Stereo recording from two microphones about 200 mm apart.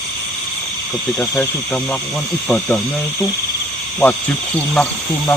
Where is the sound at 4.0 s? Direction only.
5° left (ahead or behind).